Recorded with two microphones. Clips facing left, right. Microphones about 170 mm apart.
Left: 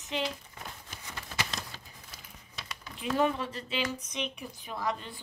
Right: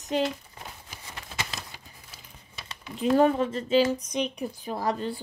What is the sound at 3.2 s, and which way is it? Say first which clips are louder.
A woman's voice: right 4 dB; 45° right (ahead or behind).